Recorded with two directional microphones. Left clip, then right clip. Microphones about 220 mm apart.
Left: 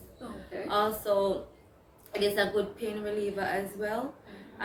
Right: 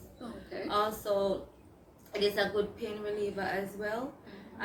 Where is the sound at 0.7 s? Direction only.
15° left (ahead or behind).